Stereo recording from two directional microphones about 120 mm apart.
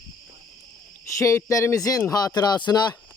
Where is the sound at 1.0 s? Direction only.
25° left (ahead or behind).